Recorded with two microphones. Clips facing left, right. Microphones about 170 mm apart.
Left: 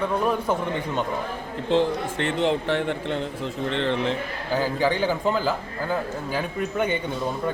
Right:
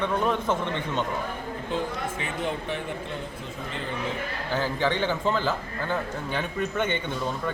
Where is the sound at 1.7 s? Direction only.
80° left.